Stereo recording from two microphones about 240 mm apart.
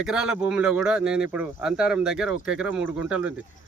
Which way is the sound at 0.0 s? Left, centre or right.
Centre.